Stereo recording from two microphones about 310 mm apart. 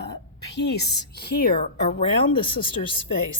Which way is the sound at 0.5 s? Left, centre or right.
Left.